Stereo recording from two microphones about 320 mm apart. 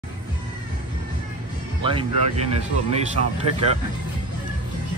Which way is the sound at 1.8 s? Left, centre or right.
Centre.